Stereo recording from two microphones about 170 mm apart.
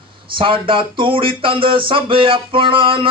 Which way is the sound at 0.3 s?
30° right (ahead or behind).